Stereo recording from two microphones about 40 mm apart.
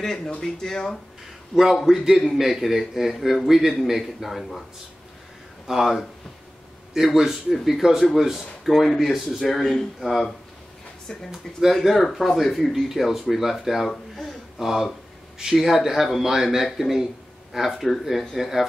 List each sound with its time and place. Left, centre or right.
0.0 s speech: centre
1.5 s a man's voice: centre
5.7 s a man's voice: centre
7.2 s speech: centre
8.8 s a man's voice: centre
9.9 s a man's voice: centre
11.1 s speech: centre
11.8 s a man's voice: centre